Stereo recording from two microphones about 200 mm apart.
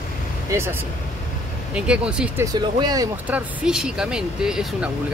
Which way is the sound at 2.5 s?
20° right (ahead or behind).